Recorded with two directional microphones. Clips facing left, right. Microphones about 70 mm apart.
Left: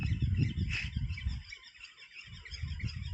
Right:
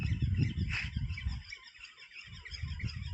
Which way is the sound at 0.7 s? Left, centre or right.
Right.